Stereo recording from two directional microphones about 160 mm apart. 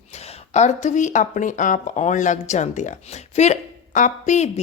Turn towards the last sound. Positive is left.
turn(degrees=45)  # may be behind; listen again after turning